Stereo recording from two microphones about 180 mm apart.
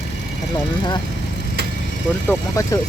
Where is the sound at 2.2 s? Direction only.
20° left (ahead or behind).